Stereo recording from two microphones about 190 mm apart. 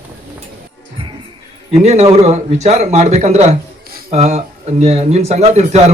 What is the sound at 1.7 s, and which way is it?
Speech, 35° right (ahead or behind).